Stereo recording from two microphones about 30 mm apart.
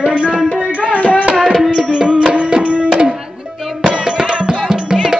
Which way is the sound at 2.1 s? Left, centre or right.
Right.